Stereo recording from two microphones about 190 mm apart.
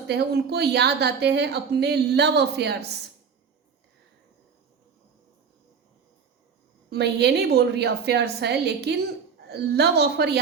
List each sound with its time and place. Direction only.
0.1 s a woman's voice: 60° right (ahead or behind)
6.9 s a woman's voice: 60° right (ahead or behind)